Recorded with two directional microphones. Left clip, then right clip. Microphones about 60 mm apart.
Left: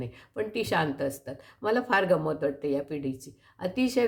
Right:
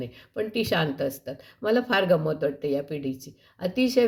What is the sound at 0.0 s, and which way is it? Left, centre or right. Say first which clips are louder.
Speech: right 3 dB; right.